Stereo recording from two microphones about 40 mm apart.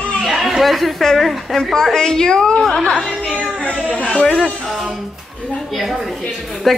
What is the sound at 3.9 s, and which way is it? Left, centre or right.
Speech, left.